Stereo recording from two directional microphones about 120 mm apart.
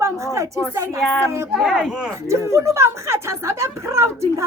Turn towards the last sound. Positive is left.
turn(degrees=-25)  # may be behind; listen again after turning